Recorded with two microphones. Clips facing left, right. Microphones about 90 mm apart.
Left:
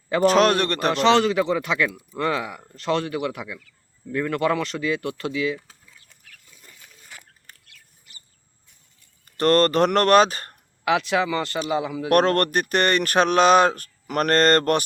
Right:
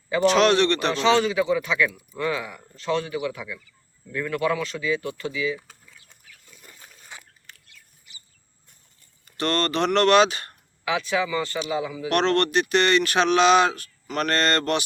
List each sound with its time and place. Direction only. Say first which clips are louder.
0.1 s speech: left 1 dB; 45° left (ahead or behind); by 5.5 s 60° left (ahead or behind)
7.7 s bird: even; 50° left (ahead or behind)
9.4 s speech: left 6 dB; 45° left (ahead or behind)
11.3 s speech: left 2 dB; 60° left (ahead or behind)